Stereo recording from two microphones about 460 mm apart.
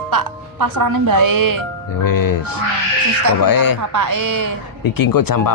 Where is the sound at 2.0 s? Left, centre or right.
Left.